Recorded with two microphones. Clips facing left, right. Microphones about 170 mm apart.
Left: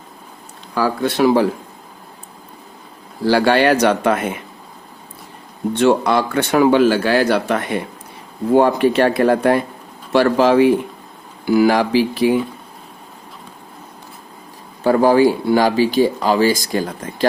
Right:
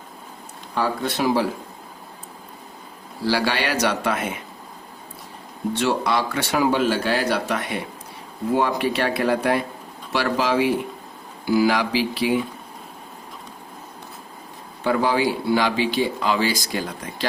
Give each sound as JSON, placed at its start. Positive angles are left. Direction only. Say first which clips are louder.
{"t": 0.7, "sound": "speech", "louder": "left 5 dB", "side_deg": 80}
{"t": 3.2, "sound": "speech", "louder": "left 9 dB", "side_deg": 50}
{"t": 5.7, "sound": "speech", "louder": "left 7 dB", "side_deg": 50}
{"t": 14.8, "sound": "speech", "louder": "left 8 dB", "side_deg": 45}